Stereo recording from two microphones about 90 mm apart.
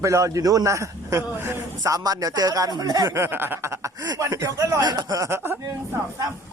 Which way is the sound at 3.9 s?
45° right (ahead or behind).